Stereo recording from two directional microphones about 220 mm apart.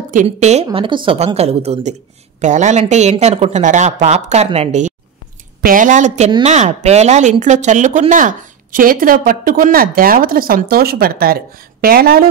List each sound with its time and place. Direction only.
0.1 s a woman's voice: 35° right (ahead or behind)